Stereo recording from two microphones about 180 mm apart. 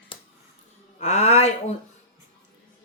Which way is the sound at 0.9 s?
40° left (ahead or behind).